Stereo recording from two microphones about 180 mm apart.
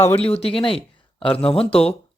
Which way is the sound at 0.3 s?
35° left (ahead or behind).